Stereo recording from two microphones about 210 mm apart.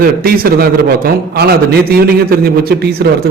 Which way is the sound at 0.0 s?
45° right (ahead or behind).